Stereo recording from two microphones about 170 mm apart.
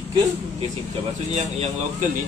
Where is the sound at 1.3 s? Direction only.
40° right (ahead or behind).